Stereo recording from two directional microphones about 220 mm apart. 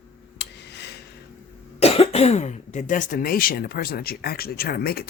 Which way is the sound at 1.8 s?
25° left (ahead or behind).